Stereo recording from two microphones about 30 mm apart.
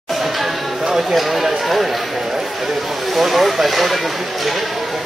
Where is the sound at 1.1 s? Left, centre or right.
Centre.